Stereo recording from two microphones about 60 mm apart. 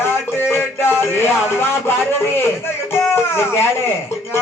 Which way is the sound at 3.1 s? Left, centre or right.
Left.